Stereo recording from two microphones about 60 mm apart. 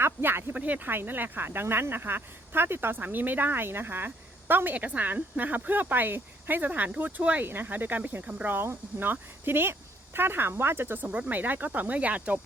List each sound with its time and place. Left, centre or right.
0.0 s speech: right
0.5 s speech: right
7.4 s speech: right
8.5 s speech: right
11.1 s speech: centre
11.3 s speech: right